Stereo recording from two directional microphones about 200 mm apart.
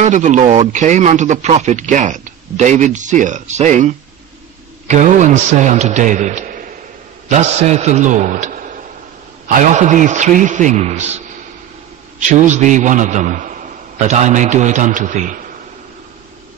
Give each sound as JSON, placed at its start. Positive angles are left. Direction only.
{"t": 0.0, "sound": "a man's voice", "side_deg": -35}